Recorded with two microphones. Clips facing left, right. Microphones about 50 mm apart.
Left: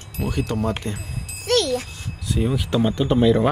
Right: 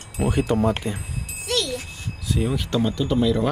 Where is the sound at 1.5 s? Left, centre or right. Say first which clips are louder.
Left 6 dB; left.